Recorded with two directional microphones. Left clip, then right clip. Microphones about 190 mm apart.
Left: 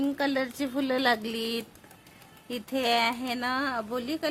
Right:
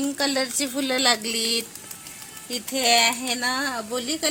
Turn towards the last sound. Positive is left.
turn(degrees=-15)  # may be behind; listen again after turning